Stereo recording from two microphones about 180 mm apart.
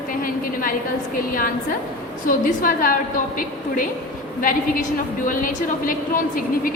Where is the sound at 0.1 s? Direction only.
50° left (ahead or behind).